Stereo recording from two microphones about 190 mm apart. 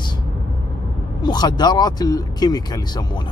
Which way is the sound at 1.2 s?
20° left (ahead or behind).